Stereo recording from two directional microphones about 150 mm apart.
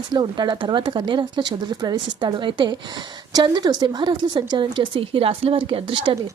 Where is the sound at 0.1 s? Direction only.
30° right (ahead or behind).